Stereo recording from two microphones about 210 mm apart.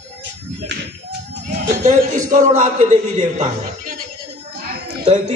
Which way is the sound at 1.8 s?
35° right (ahead or behind).